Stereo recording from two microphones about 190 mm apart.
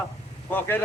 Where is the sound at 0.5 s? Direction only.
10° left (ahead or behind).